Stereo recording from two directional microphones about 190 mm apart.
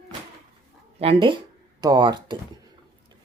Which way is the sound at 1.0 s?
30° right (ahead or behind).